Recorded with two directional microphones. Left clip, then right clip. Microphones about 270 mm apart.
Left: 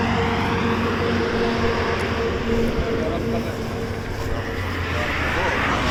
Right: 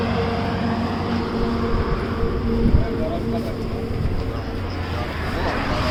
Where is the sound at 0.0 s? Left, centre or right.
Right.